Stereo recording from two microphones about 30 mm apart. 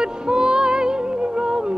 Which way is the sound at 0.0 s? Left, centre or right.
Right.